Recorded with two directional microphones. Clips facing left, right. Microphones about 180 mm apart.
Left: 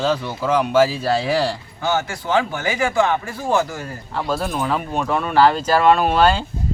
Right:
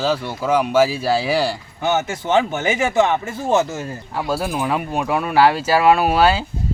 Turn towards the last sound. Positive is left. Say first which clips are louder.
# even
turn(degrees=-5)  # may be behind; listen again after turning